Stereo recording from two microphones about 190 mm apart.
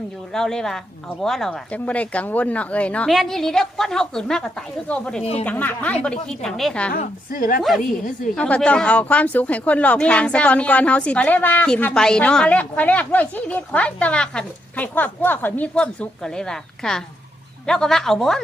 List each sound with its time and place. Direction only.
0.3 s speech: 5° left (ahead or behind)
5.2 s a man's voice: 35° left (ahead or behind)
5.5 s a woman's voice: 10° left (ahead or behind)
6.9 s a woman's voice: 45° left (ahead or behind)
8.4 s a woman's voice: 5° left (ahead or behind)